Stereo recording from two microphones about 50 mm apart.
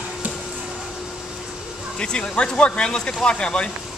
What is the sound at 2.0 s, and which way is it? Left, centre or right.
Speech, centre.